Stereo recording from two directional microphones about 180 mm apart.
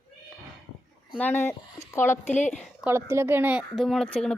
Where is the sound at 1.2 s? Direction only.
10° left (ahead or behind).